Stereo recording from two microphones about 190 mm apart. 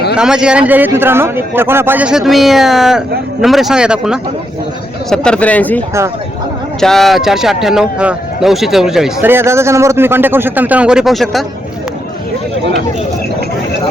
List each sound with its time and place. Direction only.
0.2 s speech: 5° right (ahead or behind)